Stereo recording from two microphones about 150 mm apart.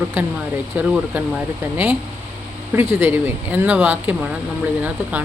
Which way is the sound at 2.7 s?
15° right (ahead or behind).